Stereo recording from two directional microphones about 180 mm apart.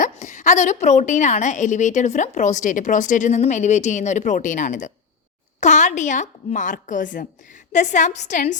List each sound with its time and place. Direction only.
0.0 s a woman's voice: 45° left (ahead or behind)